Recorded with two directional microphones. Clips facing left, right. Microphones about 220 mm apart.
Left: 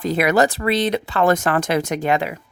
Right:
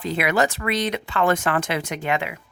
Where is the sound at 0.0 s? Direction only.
40° left (ahead or behind).